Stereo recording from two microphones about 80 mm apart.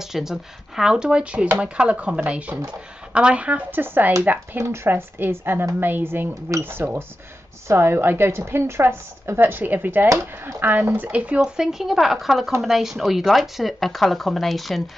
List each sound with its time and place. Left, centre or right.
0.0 s a woman's voice: centre